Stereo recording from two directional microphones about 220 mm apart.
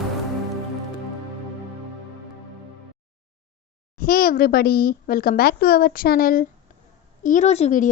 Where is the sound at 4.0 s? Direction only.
40° left (ahead or behind).